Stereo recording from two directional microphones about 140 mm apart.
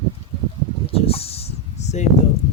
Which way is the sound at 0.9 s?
45° left (ahead or behind).